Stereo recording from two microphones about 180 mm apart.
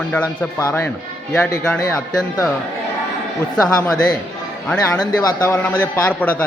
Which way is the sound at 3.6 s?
20° left (ahead or behind).